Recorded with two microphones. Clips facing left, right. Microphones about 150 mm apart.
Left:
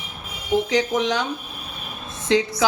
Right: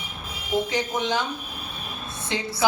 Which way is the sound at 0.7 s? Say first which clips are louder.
Left 5 dB; 90° left.